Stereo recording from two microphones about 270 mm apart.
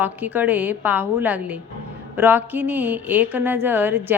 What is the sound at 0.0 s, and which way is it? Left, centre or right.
A woman's voice, centre.